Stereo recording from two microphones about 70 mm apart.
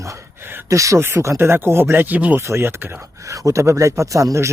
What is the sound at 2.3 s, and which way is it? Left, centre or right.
Speech, right.